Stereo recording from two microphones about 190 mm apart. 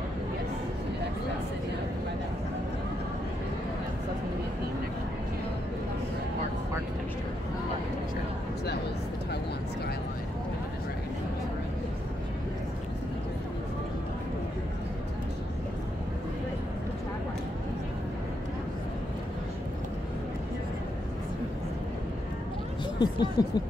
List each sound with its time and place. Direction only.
22.9 s speech: 20° left (ahead or behind)